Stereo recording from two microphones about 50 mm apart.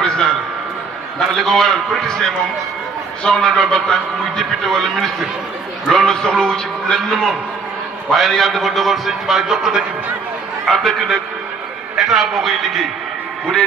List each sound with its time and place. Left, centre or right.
0.0 s a sound: centre
1.4 s a man's voice: centre
9.5 s a man's voice: centre
10.7 s a man's voice: centre